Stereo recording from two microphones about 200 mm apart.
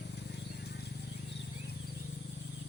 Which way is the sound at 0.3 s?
55° left (ahead or behind).